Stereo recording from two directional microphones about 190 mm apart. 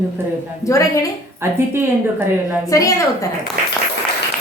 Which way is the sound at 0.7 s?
15° left (ahead or behind).